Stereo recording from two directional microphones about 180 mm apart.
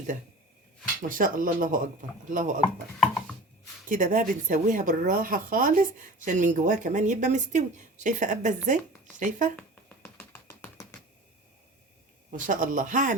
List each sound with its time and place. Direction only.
1.0 s speech: 50° right (ahead or behind)
3.8 s speech: 45° right (ahead or behind)
9.6 s a sound: 10° left (ahead or behind)
12.5 s speech: 45° right (ahead or behind)